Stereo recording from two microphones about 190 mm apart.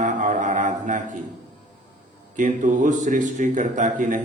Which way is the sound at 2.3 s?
40° right (ahead or behind).